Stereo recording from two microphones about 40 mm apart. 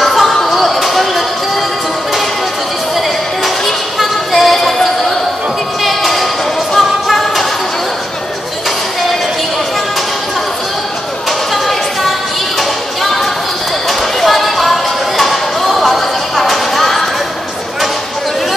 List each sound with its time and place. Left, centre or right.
0.0 s music: centre
3.4 s music: centre
5.9 s a sound: centre
6.7 s music: centre
11.5 s music: centre
13.0 s a sound: centre